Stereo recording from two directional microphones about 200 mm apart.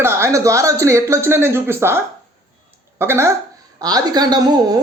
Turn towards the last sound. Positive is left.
turn(degrees=-20)  # may be behind; listen again after turning